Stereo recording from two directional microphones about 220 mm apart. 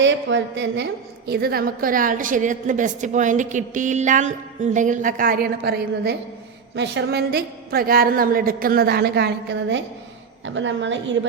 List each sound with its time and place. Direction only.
0.0 s a woman's voice: 55° right (ahead or behind)